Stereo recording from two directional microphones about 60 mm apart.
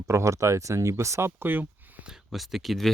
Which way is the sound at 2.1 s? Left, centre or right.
Centre.